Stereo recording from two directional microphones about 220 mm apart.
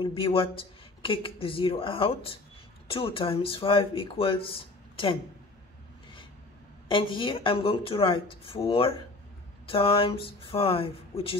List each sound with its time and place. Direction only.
0.0 s speech: 25° left (ahead or behind)
6.9 s speech: 25° left (ahead or behind)